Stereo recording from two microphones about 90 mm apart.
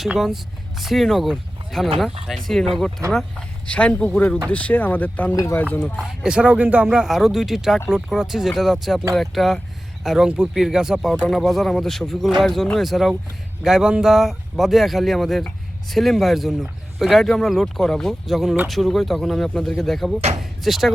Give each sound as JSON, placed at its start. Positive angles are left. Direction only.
{"t": 0.0, "sound": "speech", "side_deg": -5}
{"t": 3.3, "sound": "speech", "side_deg": 15}
{"t": 6.1, "sound": "speech", "side_deg": -10}
{"t": 6.8, "sound": "speech", "side_deg": -5}